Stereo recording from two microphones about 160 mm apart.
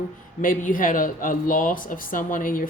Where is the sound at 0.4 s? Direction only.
60° left (ahead or behind).